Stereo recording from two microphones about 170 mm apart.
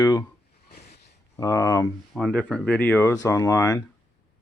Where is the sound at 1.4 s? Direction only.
20° left (ahead or behind).